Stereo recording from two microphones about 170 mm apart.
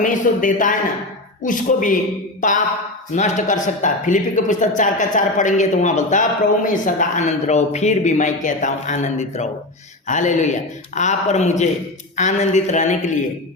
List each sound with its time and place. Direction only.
0.0 s speech: 50° left (ahead or behind)